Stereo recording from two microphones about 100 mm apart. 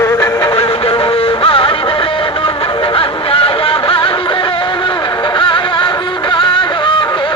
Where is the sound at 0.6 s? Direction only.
65° left (ahead or behind).